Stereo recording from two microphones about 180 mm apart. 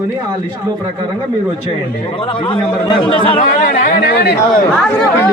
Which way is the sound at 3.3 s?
50° left (ahead or behind).